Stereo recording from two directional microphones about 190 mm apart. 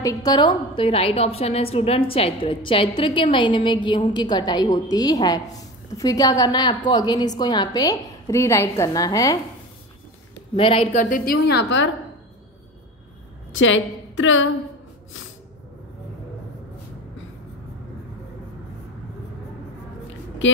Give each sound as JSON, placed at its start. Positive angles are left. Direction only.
{"t": 0.0, "sound": "a woman's voice", "side_deg": 20}
{"t": 10.5, "sound": "a woman's voice", "side_deg": 30}
{"t": 11.0, "sound": "a woman's voice", "side_deg": 45}
{"t": 13.6, "sound": "a woman's voice", "side_deg": 85}